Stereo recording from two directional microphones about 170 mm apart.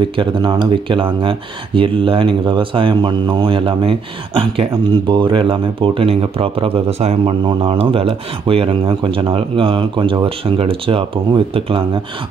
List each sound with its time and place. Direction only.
0.2 s speech: 25° right (ahead or behind)